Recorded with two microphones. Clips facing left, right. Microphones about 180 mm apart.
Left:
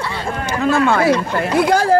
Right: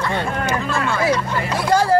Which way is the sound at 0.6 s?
60° left (ahead or behind).